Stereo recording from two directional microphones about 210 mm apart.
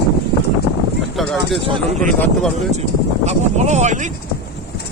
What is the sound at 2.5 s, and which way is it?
Speech, 30° right (ahead or behind).